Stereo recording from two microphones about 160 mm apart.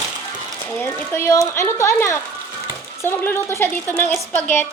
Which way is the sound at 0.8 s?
15° left (ahead or behind).